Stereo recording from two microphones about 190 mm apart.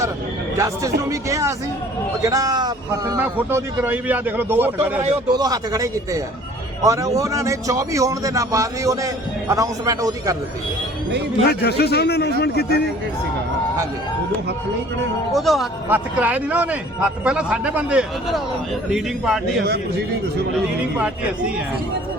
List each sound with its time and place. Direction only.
0.5 s a man's voice: 15° right (ahead or behind)
3.2 s a man's voice: 10° right (ahead or behind)
11.4 s a man's voice: 60° left (ahead or behind)
15.3 s speech: centre (ahead or behind)
21.0 s a man's voice: 5° right (ahead or behind)